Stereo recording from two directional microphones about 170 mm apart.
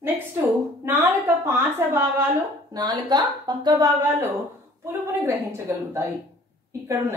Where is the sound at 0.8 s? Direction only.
10° right (ahead or behind).